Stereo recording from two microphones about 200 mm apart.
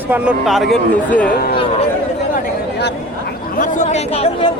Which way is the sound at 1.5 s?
25° left (ahead or behind).